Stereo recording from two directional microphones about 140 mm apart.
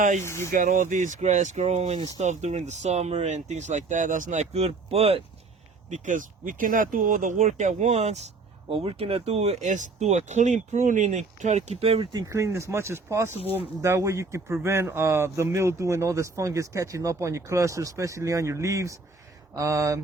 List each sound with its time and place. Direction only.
0.2 s speech: 20° left (ahead or behind)
0.5 s speech: 70° right (ahead or behind); by 5.2 s 45° right (ahead or behind)
5.9 s speech: 65° right (ahead or behind)
8.7 s speech: 40° right (ahead or behind)
12.1 s speech: 20° right (ahead or behind)